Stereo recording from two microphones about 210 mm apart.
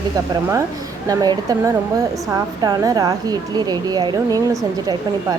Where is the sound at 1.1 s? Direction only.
20° right (ahead or behind).